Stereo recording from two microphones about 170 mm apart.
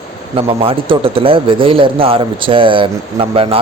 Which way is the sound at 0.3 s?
35° right (ahead or behind).